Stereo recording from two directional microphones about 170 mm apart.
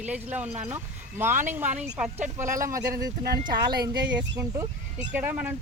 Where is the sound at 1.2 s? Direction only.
15° right (ahead or behind).